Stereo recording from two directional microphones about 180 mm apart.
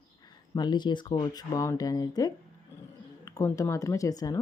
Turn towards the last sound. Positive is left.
turn(degrees=20)  # may be behind; listen again after turning